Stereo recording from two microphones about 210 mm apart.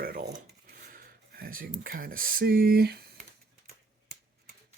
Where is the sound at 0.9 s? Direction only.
45° right (ahead or behind).